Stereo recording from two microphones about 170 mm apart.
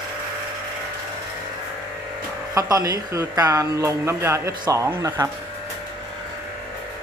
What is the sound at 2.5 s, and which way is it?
Speech, 20° right (ahead or behind).